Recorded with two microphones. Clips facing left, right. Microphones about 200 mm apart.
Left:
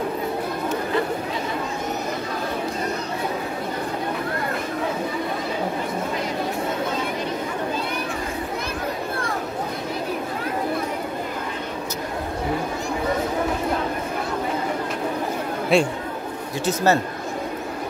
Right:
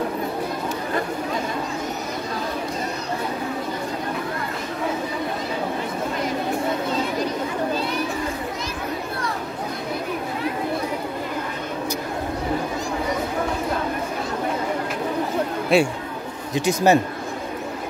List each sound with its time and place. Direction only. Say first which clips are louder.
15.7 s speech: right 1 dB; centre (ahead or behind)
16.5 s speech: right 3 dB; 15° right (ahead or behind)